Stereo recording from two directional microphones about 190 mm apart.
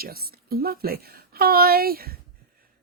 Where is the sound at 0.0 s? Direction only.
50° right (ahead or behind).